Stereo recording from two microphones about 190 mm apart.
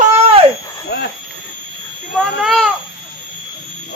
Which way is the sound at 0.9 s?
55° left (ahead or behind).